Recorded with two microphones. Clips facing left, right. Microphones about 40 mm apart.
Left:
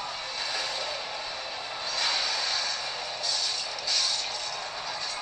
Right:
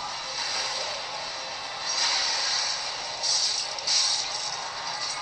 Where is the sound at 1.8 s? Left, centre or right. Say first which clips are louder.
Right 1 dB; left.